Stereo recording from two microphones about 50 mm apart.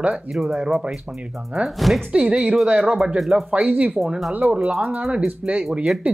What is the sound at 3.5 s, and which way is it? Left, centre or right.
Speech, right.